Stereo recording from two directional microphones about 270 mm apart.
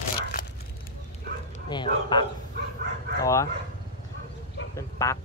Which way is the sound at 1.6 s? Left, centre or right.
Centre.